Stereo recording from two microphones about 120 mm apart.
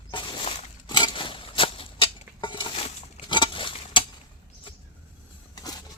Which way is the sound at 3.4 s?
45° left (ahead or behind).